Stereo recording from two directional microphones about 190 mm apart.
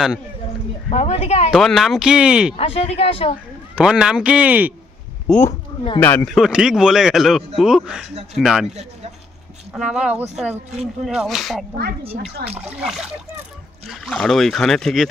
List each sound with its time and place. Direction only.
0.8 s speech: 35° left (ahead or behind)
1.5 s speech: centre (ahead or behind)
2.5 s speech: 30° left (ahead or behind)
3.7 s speech: 5° right (ahead or behind)
5.2 s speech: 5° left (ahead or behind)
9.7 s speech: 5° right (ahead or behind)
12.0 s speech: 30° right (ahead or behind)
12.5 s speech: 10° right (ahead or behind)